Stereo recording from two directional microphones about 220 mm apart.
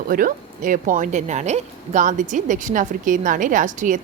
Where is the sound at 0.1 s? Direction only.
40° right (ahead or behind).